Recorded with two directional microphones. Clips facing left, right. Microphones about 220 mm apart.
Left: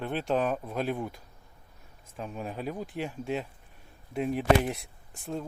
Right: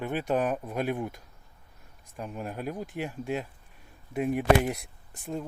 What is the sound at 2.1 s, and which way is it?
Speech, 5° right (ahead or behind).